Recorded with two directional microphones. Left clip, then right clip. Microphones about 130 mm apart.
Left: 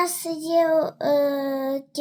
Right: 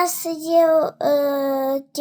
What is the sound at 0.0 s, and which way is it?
Child singing, 30° left (ahead or behind).